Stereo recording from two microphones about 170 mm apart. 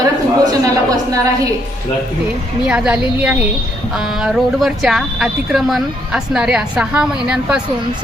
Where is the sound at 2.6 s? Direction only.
5° right (ahead or behind).